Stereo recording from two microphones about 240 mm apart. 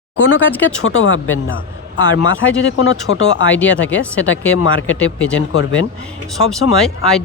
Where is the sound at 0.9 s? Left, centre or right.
Left.